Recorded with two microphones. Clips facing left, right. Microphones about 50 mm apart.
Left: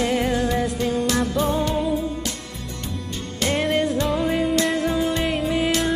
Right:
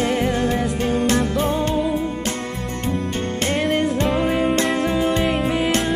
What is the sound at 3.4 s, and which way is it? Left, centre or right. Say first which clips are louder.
Music: even; right.